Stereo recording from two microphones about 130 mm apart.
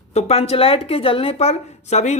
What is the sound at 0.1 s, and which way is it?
Speech, 55° left (ahead or behind).